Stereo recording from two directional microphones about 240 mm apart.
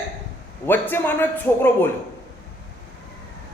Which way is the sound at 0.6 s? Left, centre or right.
Centre.